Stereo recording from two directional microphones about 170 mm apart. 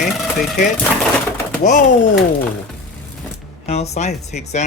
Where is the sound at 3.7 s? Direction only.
40° left (ahead or behind).